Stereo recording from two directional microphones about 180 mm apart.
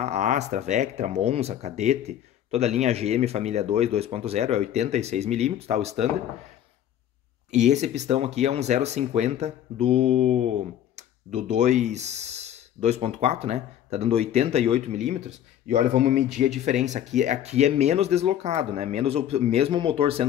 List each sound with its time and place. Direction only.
0.0 s speech: 40° right (ahead or behind)
7.5 s speech: 40° right (ahead or behind)